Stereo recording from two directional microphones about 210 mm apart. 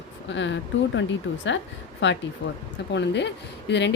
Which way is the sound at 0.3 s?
60° left (ahead or behind).